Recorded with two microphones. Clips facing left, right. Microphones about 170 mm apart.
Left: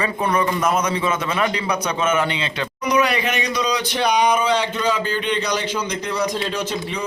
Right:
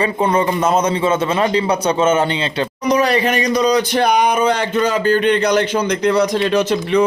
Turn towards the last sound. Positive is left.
turn(degrees=-70)  # may be behind; listen again after turning